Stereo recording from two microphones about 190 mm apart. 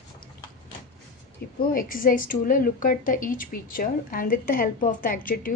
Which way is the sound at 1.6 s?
50° left (ahead or behind).